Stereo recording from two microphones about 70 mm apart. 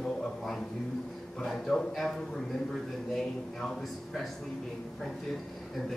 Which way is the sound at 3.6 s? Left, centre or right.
Centre.